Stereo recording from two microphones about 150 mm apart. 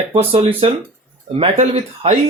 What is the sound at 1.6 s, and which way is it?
Speech, 45° right (ahead or behind).